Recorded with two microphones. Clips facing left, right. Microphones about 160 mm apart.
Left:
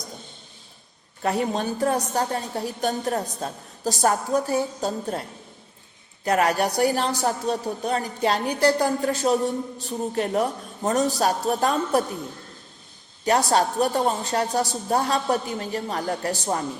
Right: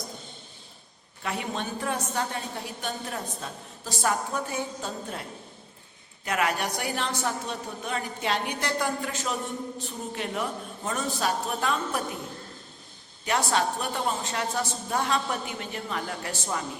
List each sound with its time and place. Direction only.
1.2 s a woman's voice: 40° left (ahead or behind)
6.2 s a woman's voice: 40° left (ahead or behind)
13.2 s a woman's voice: 40° left (ahead or behind)